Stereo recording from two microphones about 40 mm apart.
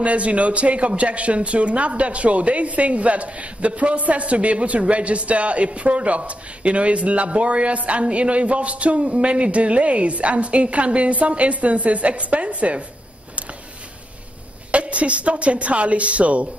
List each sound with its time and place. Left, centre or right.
0.0 s speech: right
14.7 s speech: right